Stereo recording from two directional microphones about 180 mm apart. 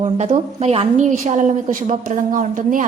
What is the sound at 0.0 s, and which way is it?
A woman's voice, 35° right (ahead or behind).